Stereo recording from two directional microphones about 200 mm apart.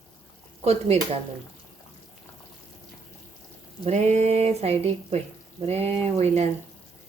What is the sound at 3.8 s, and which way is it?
Speech, 35° right (ahead or behind).